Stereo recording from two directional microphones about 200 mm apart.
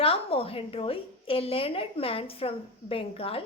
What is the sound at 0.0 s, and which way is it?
A woman's voice, 30° left (ahead or behind).